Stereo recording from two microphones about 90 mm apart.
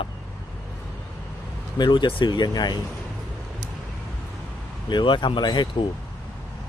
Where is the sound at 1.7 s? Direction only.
55° left (ahead or behind).